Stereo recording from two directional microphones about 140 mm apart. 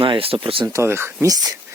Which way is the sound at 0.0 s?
40° right (ahead or behind).